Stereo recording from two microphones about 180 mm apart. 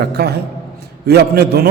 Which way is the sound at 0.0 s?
65° right (ahead or behind).